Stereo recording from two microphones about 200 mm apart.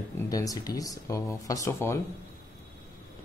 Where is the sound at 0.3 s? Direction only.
15° left (ahead or behind).